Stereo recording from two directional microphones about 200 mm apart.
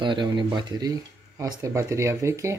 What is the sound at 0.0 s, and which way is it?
Speech, 25° right (ahead or behind).